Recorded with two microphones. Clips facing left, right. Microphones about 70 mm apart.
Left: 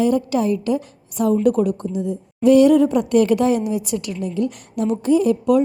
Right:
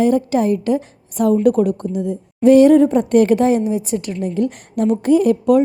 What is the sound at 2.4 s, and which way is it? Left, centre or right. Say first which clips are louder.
A woman's voice: right 3 dB; right.